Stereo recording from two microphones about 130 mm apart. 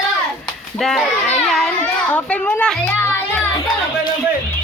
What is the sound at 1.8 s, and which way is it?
Music, 10° left (ahead or behind).